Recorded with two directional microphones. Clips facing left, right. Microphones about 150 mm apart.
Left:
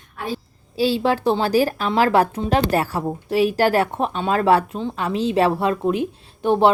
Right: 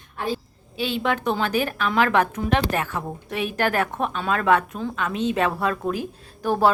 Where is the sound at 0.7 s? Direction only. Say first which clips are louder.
Left 5 dB; 35° left (ahead or behind).